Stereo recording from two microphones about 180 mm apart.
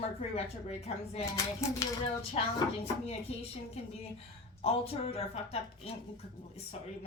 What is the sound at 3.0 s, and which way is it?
Speech, 35° left (ahead or behind).